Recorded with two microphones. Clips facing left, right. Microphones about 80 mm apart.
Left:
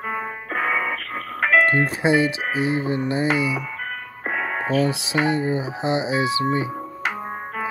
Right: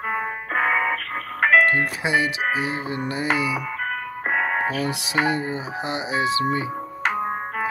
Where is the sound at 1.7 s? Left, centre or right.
Left.